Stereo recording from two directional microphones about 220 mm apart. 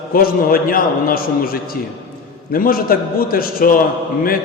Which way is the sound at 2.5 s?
40° left (ahead or behind).